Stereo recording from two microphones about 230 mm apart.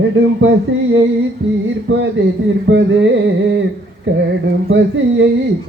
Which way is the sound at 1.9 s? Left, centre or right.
Right.